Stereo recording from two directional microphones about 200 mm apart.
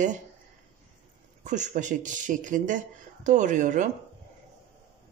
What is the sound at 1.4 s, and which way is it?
Speech, 40° right (ahead or behind).